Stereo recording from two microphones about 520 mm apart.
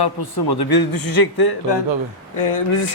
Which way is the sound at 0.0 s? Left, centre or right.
Left.